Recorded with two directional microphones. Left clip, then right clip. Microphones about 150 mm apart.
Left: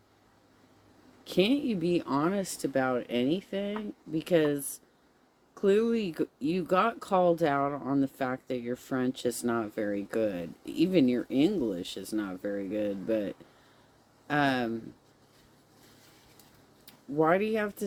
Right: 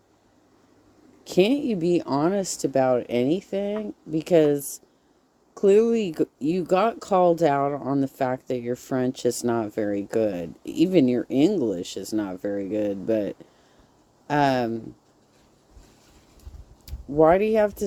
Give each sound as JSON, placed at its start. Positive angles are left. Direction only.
{"t": 1.2, "sound": "speech", "side_deg": -45}
{"t": 16.8, "sound": "speech", "side_deg": -45}